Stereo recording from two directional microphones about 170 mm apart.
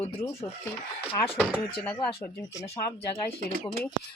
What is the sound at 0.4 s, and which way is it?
Speech, 25° left (ahead or behind).